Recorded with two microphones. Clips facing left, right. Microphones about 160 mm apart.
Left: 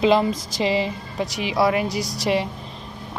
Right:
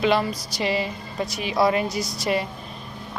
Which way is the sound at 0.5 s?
90° left.